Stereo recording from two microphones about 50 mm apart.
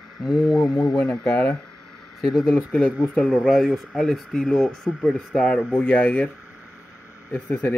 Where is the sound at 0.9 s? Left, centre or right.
Left.